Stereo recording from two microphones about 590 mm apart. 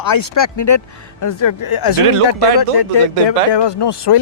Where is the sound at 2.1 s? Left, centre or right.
Right.